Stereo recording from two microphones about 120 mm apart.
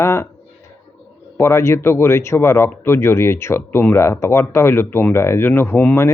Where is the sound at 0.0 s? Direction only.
20° left (ahead or behind).